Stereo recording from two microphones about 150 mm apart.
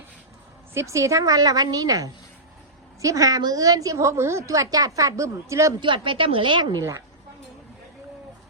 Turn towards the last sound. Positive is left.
turn(degrees=-30)  # may be behind; listen again after turning